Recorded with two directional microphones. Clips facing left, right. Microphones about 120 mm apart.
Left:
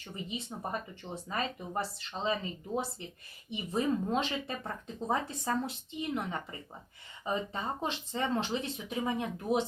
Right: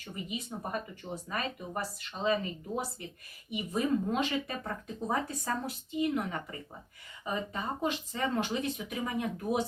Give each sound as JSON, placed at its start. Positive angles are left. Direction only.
{"t": 0.0, "sound": "speech", "side_deg": 25}